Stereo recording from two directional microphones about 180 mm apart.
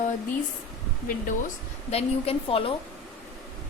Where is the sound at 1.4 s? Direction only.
35° left (ahead or behind).